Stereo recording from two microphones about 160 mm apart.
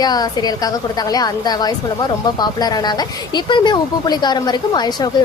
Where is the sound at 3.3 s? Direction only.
25° left (ahead or behind).